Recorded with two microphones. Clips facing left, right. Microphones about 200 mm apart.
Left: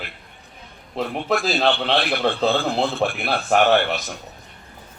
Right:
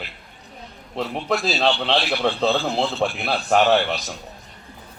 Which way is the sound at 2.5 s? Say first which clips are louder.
Left 1 dB; 55° left (ahead or behind).